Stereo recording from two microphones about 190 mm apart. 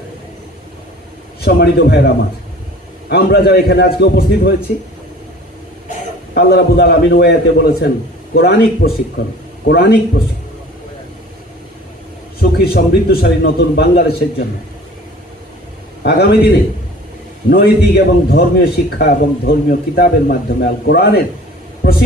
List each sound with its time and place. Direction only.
1.4 s a man's voice: 60° left (ahead or behind)
3.1 s a man's voice: 55° left (ahead or behind)
6.3 s a man's voice: 60° left (ahead or behind)
12.4 s a man's voice: 55° left (ahead or behind)
16.0 s a man's voice: 60° left (ahead or behind)
17.5 s a man's voice: 55° left (ahead or behind)
21.8 s a sound: 60° left (ahead or behind)